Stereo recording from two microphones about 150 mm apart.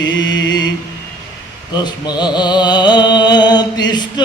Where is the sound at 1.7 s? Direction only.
30° left (ahead or behind).